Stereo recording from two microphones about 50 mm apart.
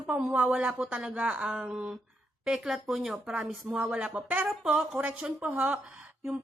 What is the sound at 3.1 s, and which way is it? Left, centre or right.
Speech, centre.